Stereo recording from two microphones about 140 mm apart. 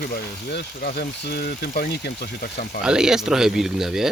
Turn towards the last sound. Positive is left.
turn(degrees=-5)  # may be behind; listen again after turning